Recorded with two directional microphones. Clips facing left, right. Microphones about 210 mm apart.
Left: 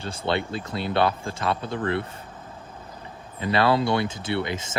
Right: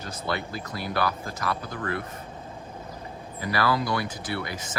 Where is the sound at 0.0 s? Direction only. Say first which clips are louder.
Left 5 dB; 30° left (ahead or behind).